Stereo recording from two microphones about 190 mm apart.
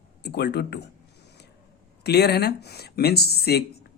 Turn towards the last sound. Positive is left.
turn(degrees=55)  # may be behind; listen again after turning